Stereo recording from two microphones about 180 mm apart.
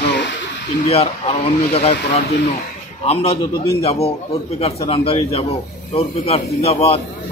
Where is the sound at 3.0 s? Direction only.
35° left (ahead or behind).